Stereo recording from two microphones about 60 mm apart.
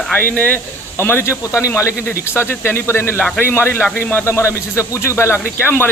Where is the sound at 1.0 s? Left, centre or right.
Left.